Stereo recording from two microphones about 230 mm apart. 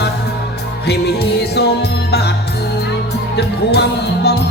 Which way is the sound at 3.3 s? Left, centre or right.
Left.